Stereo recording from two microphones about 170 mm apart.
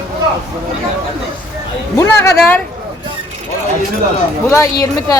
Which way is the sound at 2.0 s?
15° left (ahead or behind).